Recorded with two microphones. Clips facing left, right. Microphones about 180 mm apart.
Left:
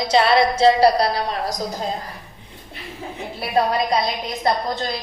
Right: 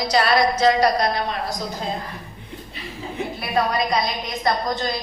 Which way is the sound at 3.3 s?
30° left (ahead or behind).